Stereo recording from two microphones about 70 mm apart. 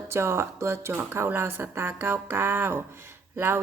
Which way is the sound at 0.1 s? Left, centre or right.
Right.